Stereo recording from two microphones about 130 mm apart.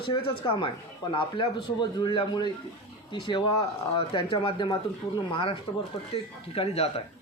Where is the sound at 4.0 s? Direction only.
45° left (ahead or behind).